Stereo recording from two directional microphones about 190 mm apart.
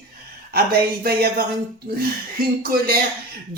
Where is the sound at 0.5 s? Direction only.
55° right (ahead or behind).